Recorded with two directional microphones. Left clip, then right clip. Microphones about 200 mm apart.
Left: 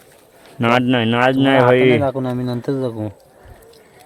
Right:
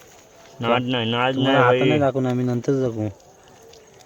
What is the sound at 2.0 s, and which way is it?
Speech, centre (ahead or behind).